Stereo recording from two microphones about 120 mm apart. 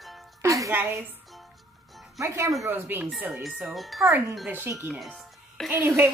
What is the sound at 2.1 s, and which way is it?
A woman's voice, 25° right (ahead or behind).